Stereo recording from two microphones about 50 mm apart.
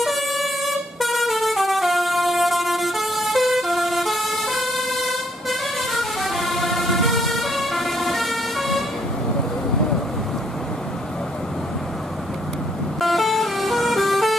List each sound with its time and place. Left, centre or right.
0.0 s air horn: centre
1.0 s vehicle: centre
13.0 s vehicle: centre